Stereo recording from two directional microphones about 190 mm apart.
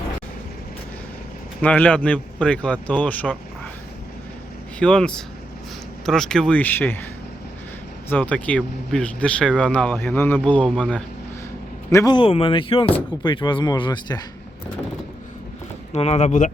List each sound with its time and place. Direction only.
1.6 s speech: 10° left (ahead or behind)
4.8 s speech: 5° left (ahead or behind)
8.1 s speech: 5° left (ahead or behind)
11.9 s speech: 20° left (ahead or behind)
15.9 s speech: 35° left (ahead or behind)